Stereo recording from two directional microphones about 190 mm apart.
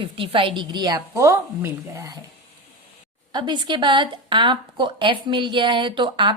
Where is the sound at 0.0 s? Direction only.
25° right (ahead or behind).